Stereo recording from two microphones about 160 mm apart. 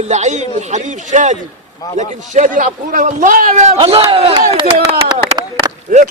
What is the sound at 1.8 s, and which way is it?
Speech, 20° left (ahead or behind).